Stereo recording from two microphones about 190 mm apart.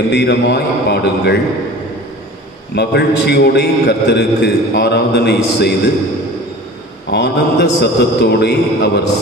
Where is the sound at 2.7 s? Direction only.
60° left (ahead or behind).